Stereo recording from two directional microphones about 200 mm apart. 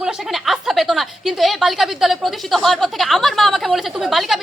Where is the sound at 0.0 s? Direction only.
Centre (ahead or behind).